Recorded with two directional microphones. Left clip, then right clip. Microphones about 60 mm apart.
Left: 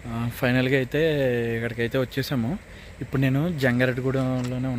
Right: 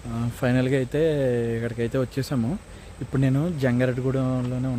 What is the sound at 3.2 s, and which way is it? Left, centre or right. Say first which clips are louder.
Speech: even; centre.